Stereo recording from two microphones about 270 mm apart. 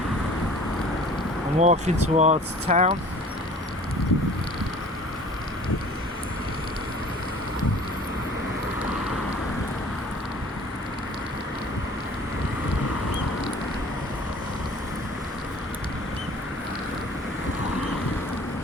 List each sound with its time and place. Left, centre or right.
1.5 s speech: right